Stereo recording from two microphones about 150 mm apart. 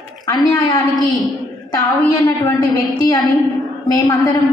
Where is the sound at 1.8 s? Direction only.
25° left (ahead or behind).